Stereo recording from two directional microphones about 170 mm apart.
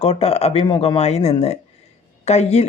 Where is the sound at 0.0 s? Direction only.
35° left (ahead or behind).